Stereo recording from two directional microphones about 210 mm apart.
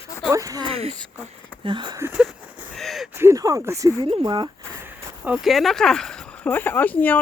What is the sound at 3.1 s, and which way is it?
Speech, 15° right (ahead or behind).